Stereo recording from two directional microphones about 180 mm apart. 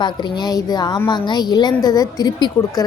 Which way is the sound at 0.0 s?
25° left (ahead or behind).